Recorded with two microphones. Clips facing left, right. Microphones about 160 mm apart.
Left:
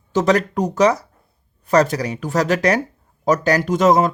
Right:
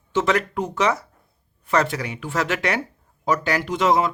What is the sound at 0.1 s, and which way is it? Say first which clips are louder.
A man's voice: left 4 dB; 40° left (ahead or behind).